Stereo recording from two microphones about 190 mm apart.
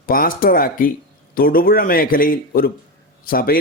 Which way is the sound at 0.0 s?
50° left (ahead or behind).